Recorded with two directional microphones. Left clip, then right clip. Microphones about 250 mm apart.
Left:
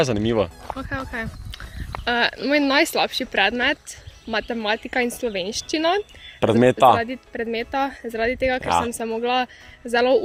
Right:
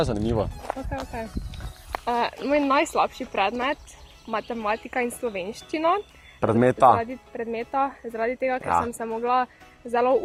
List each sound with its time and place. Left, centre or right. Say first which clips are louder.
0.0 s speech: left 5 dB; left
6.4 s speech: left 3 dB; left
6.9 s speech: left 3 dB; left
8.6 s speech: left 1 dB; left
9.0 s speech: left 1 dB; left